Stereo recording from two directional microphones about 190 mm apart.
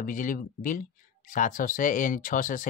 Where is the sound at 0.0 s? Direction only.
45° left (ahead or behind).